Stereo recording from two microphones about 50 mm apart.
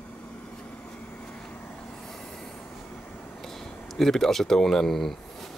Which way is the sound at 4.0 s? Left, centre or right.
Centre.